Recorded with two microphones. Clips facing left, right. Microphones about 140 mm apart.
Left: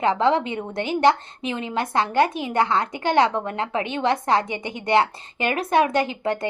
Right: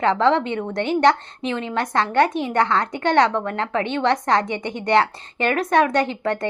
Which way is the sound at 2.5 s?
10° left (ahead or behind).